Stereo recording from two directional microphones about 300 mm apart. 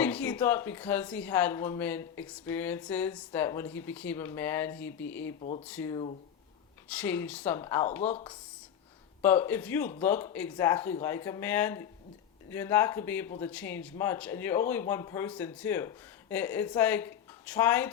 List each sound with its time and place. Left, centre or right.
0.0 s speech: centre
5.4 s speech: centre
5.6 s speech: centre
9.2 s speech: centre